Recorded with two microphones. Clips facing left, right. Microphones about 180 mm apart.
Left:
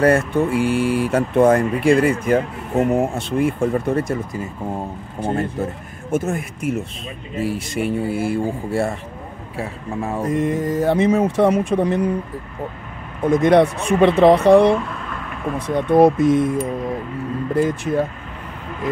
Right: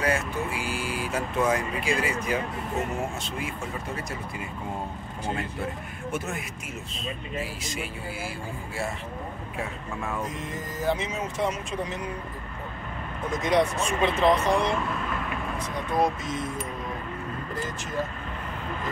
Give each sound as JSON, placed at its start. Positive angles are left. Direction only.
{"t": 0.0, "sound": "speech", "side_deg": 60}
{"t": 0.5, "sound": "speech", "side_deg": 0}
{"t": 1.1, "sound": "speech", "side_deg": 60}
{"t": 5.2, "sound": "speech", "side_deg": 45}
{"t": 9.6, "sound": "speech", "side_deg": 30}
{"t": 10.2, "sound": "speech", "side_deg": 60}
{"t": 13.2, "sound": "speech", "side_deg": 60}
{"t": 17.6, "sound": "speech", "side_deg": 60}